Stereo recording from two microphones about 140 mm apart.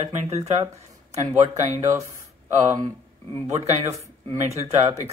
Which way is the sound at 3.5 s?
50° right (ahead or behind).